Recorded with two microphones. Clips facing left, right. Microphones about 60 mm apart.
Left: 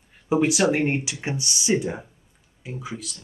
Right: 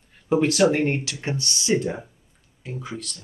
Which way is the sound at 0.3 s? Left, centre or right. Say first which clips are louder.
Right 1 dB; centre.